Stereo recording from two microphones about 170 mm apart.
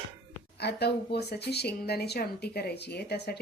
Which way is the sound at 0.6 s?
75° left (ahead or behind).